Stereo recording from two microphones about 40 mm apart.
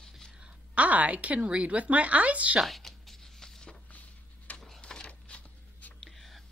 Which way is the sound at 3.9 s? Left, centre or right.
Left.